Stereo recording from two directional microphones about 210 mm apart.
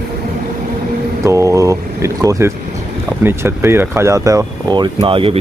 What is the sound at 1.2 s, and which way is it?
Speech, 15° right (ahead or behind).